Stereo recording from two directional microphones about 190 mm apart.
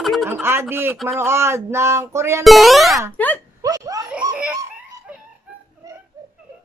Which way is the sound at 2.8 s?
15° right (ahead or behind).